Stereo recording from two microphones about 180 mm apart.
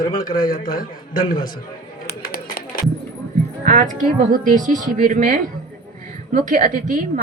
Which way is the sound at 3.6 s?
45° right (ahead or behind).